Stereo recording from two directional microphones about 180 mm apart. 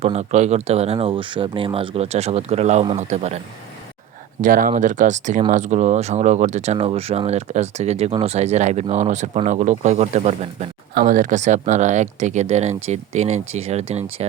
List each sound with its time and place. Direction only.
0.0 s speech: 40° right (ahead or behind)
4.4 s speech: 50° right (ahead or behind)
10.9 s speech: 50° right (ahead or behind)